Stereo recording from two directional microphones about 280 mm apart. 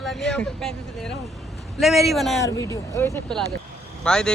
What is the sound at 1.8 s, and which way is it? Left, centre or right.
Speech, centre.